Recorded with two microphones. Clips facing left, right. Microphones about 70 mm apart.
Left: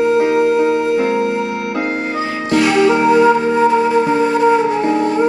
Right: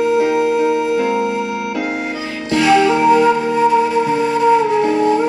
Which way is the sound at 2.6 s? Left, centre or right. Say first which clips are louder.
Right 1 dB; left.